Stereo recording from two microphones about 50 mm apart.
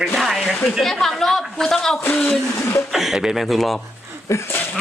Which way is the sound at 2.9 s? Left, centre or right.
Centre.